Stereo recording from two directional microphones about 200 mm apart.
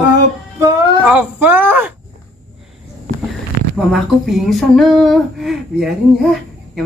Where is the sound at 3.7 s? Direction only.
Centre (ahead or behind).